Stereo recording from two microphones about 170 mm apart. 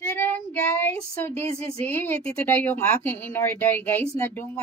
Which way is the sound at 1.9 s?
10° left (ahead or behind).